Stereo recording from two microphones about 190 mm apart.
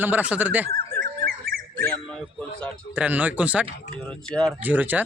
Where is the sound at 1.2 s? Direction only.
50° right (ahead or behind).